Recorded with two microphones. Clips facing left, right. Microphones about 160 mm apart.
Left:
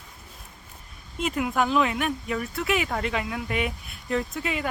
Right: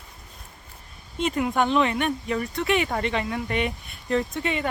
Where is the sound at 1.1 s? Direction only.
5° left (ahead or behind).